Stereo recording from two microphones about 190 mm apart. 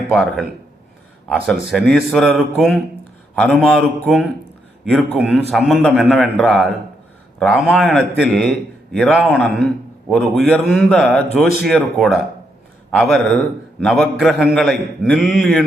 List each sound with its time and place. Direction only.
0.1 s a man's voice: centre (ahead or behind)
1.7 s a man's voice: centre (ahead or behind)